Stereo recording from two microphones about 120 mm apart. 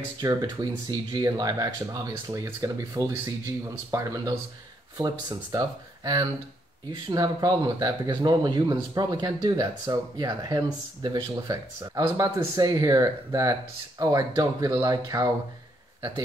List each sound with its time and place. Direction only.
0.2 s speech: 35° right (ahead or behind)